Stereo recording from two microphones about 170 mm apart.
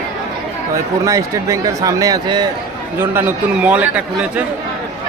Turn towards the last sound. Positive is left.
turn(degrees=-5)  # may be behind; listen again after turning